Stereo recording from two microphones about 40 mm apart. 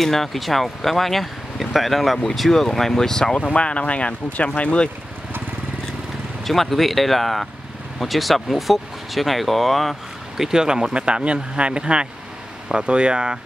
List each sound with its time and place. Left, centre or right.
0.0 s speech: centre
3.3 s speech: left
6.4 s speech: centre
10.3 s speech: centre